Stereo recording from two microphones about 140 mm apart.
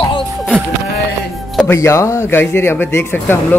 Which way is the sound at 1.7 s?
20° left (ahead or behind).